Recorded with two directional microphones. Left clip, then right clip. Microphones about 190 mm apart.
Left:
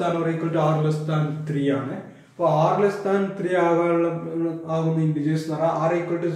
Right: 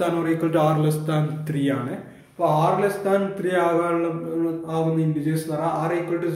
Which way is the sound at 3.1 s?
20° right (ahead or behind).